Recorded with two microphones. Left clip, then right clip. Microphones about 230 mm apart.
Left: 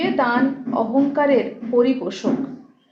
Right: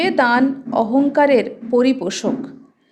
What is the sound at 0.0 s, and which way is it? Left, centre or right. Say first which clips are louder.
A woman's voice: right 4 dB; right.